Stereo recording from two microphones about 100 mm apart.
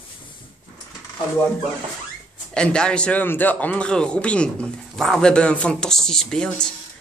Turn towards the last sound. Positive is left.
turn(degrees=5)  # may be behind; listen again after turning